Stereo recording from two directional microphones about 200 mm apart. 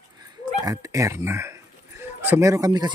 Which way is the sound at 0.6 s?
20° right (ahead or behind).